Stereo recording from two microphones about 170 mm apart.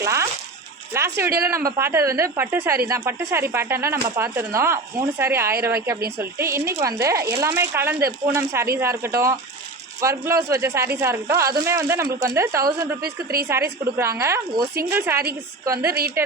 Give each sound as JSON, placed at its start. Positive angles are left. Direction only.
{"t": 0.0, "sound": "a sound", "side_deg": -15}
{"t": 0.9, "sound": "speech", "side_deg": -15}
{"t": 13.0, "sound": "a woman's voice", "side_deg": -65}
{"t": 13.5, "sound": "speech", "side_deg": -15}
{"t": 15.9, "sound": "a woman's voice", "side_deg": -65}